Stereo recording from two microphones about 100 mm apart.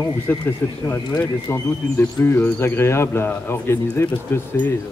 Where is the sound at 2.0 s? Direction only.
25° left (ahead or behind).